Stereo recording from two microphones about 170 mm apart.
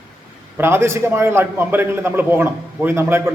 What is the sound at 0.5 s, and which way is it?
A man's voice, 15° right (ahead or behind).